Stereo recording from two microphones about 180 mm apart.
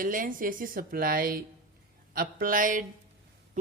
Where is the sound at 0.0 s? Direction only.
50° right (ahead or behind).